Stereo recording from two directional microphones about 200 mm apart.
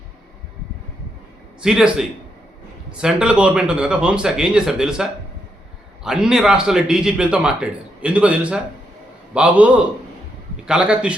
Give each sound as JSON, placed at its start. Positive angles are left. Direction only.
{"t": 1.6, "sound": "a man's voice", "side_deg": -5}